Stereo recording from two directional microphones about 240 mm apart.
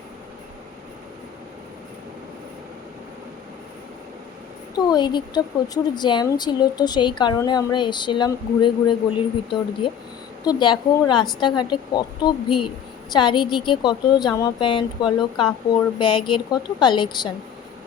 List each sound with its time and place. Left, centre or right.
4.7 s a woman's voice: centre